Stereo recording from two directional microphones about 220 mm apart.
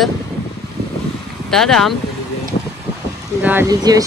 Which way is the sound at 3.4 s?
10° right (ahead or behind).